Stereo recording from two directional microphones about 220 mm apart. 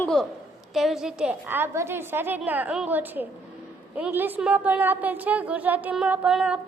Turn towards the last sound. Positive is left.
turn(degrees=-5)  # may be behind; listen again after turning